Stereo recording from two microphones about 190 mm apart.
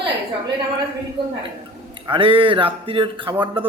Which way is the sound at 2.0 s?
25° right (ahead or behind).